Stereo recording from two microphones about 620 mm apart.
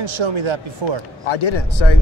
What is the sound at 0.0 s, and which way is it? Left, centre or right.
Speech, right.